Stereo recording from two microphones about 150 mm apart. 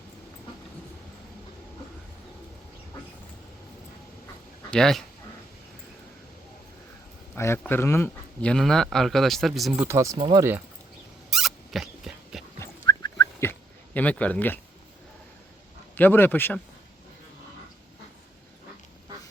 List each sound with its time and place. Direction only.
4.7 s speech: 5° left (ahead or behind)
7.3 s speech: 15° left (ahead or behind); by 9.8 s centre (ahead or behind)
9.8 s speech: 15° right (ahead or behind)
11.3 s a sound: centre (ahead or behind)
12.5 s dog: 20° left (ahead or behind)
13.5 s a sound: 10° left (ahead or behind)
16.0 s speech: 15° left (ahead or behind)